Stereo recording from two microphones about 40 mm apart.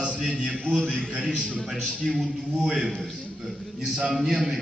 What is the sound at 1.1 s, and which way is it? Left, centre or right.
Speech, right.